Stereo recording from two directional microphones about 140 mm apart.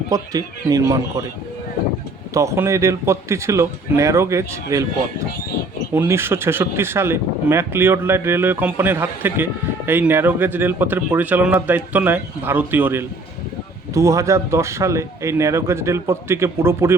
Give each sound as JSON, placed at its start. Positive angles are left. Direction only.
{"t": 0.1, "sound": "a man's voice", "side_deg": -25}
{"t": 2.3, "sound": "a man's voice", "side_deg": -20}
{"t": 5.9, "sound": "a man's voice", "side_deg": -15}